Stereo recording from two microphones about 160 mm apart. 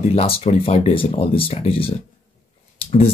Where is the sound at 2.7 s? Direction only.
40° left (ahead or behind).